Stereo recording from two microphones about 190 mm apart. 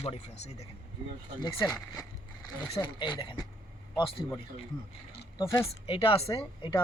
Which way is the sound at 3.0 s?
25° left (ahead or behind).